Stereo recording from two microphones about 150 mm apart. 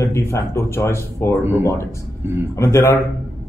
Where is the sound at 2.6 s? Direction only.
20° left (ahead or behind).